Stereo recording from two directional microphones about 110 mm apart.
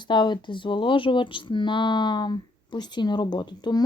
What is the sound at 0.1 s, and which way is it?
Speech, 45° left (ahead or behind).